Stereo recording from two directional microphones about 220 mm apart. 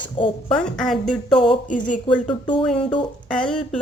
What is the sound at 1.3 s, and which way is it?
Speech, 20° left (ahead or behind).